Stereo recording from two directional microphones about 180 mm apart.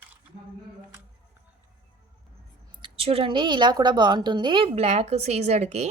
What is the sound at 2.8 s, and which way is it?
A woman's voice, 30° right (ahead or behind).